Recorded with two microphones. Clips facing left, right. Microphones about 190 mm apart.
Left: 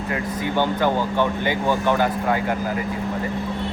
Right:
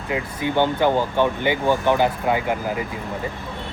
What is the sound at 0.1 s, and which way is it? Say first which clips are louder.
Speech: right 2 dB; 15° right (ahead or behind).